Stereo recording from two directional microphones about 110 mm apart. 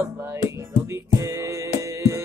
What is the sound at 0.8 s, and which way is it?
Music, 25° right (ahead or behind).